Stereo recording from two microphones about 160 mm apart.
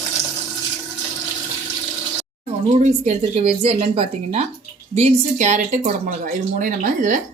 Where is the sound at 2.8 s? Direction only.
45° right (ahead or behind).